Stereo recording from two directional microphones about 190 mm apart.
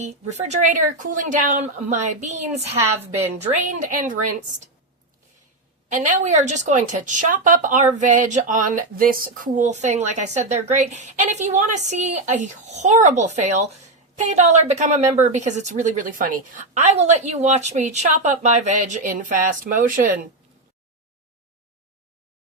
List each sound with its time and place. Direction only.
0.0 s speech: 35° right (ahead or behind)
5.9 s speech: 40° right (ahead or behind)